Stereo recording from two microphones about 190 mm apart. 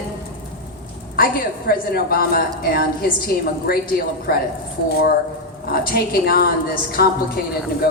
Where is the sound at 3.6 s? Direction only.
55° left (ahead or behind).